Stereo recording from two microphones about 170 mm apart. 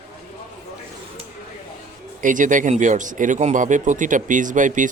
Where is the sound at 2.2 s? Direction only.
50° right (ahead or behind).